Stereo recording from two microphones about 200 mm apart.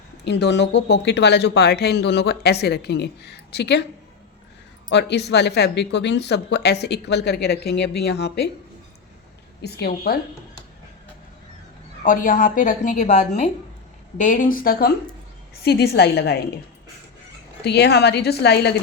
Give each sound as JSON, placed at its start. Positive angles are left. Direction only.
{"t": 0.3, "sound": "speech", "side_deg": 60}
{"t": 4.9, "sound": "speech", "side_deg": 60}
{"t": 9.6, "sound": "speech", "side_deg": 55}
{"t": 12.0, "sound": "a woman's voice", "side_deg": 40}
{"t": 17.6, "sound": "speech", "side_deg": 55}